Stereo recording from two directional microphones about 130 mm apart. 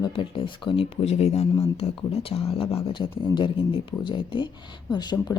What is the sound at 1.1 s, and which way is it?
Speech, 55° left (ahead or behind).